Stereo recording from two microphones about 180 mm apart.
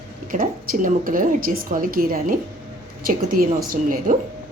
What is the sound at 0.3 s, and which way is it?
A woman's voice, 50° right (ahead or behind).